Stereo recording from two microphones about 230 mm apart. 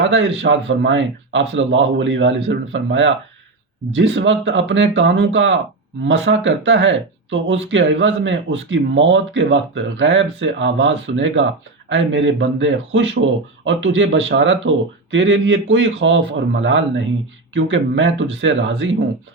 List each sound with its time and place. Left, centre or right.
0.0 s speech: right